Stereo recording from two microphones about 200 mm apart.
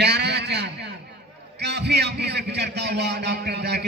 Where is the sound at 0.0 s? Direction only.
55° right (ahead or behind).